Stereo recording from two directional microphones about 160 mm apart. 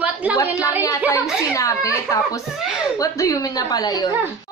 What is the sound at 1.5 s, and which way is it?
A woman's voice, 20° left (ahead or behind).